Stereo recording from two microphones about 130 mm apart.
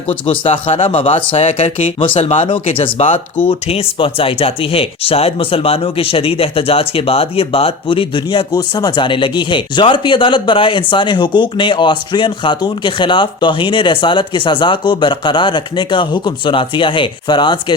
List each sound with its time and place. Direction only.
0.1 s speech: 45° left (ahead or behind)